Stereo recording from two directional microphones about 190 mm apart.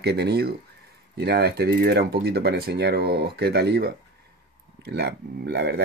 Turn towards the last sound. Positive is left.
turn(degrees=-60)  # may be behind; listen again after turning